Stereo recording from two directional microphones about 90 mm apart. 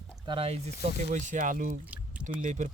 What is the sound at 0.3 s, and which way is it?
Speech, 60° right (ahead or behind).